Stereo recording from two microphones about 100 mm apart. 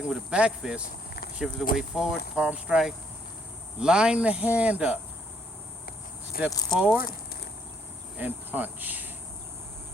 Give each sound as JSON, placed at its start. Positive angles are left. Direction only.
{"t": 0.3, "sound": "speech", "side_deg": -10}
{"t": 6.5, "sound": "speech", "side_deg": 40}
{"t": 6.7, "sound": "speech", "side_deg": -15}
{"t": 8.2, "sound": "speech", "side_deg": -20}